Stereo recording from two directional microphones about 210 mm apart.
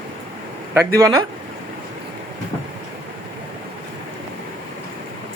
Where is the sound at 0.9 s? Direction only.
15° right (ahead or behind).